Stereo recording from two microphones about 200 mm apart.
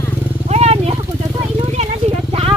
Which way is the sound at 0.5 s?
30° right (ahead or behind).